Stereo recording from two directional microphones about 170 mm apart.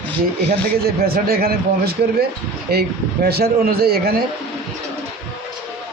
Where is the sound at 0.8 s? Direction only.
65° right (ahead or behind).